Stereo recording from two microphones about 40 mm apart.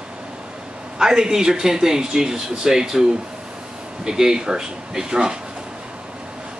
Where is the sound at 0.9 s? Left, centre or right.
Centre.